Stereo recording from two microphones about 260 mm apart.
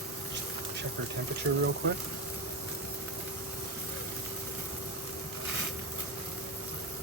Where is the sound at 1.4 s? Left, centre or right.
Right.